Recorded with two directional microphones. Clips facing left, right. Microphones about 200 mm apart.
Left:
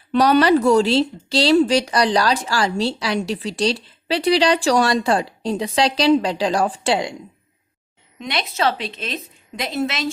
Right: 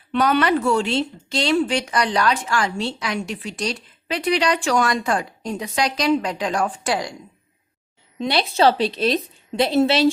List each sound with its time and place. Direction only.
0.1 s speech: 35° left (ahead or behind)
8.2 s a woman's voice: 30° right (ahead or behind)